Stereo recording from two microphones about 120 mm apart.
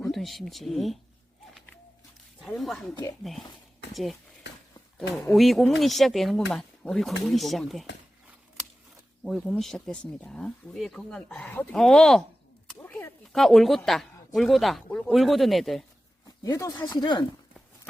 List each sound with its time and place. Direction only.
0.1 s speech: centre (ahead or behind)
2.4 s speech: centre (ahead or behind)
3.9 s speech: centre (ahead or behind)
5.3 s speech: centre (ahead or behind)
9.2 s speech: centre (ahead or behind)
12.6 s a sound: 20° left (ahead or behind)
13.3 s speech: 5° left (ahead or behind)
16.4 s speech: 30° left (ahead or behind)